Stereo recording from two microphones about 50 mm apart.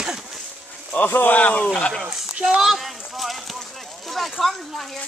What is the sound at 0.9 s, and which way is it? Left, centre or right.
Speech, left.